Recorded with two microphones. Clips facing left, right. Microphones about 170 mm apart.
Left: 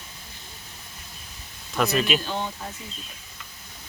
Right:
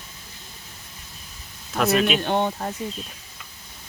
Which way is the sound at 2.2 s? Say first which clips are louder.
Right 8 dB; 60° right (ahead or behind).